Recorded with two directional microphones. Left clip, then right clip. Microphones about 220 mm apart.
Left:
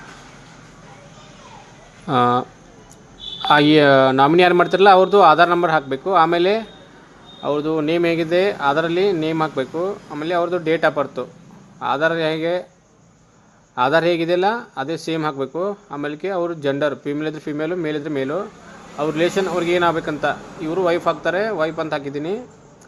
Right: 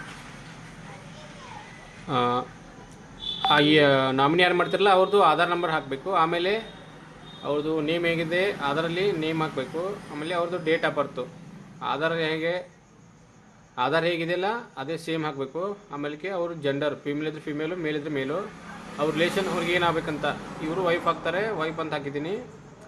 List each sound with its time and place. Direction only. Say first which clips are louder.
2.0 s a man's voice: left 8 dB; 35° left (ahead or behind)
3.5 s a man's voice: left 7 dB; 35° left (ahead or behind)
13.7 s a man's voice: left 8 dB; 35° left (ahead or behind)